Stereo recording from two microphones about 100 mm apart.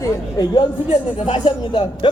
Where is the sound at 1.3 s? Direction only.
55° left (ahead or behind).